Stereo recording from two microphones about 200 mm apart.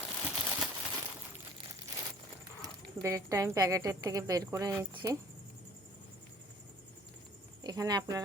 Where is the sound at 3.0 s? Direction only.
15° right (ahead or behind).